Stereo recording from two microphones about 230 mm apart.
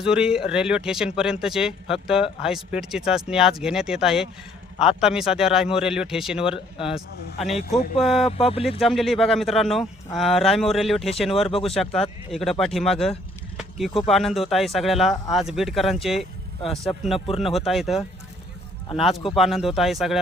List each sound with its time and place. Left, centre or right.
0.0 s a man's voice: centre
8.3 s speech: left
8.8 s a man's voice: centre
13.6 s a sound: centre
14.1 s a man's voice: centre
17.2 s speech: left
17.7 s a man's voice: centre
19.4 s a man's voice: centre